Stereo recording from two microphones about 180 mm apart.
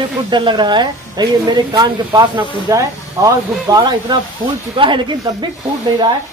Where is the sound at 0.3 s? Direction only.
25° right (ahead or behind).